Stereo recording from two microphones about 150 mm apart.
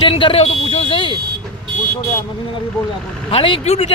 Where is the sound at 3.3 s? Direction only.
35° left (ahead or behind).